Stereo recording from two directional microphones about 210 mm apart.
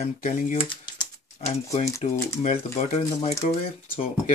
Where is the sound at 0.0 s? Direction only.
35° left (ahead or behind).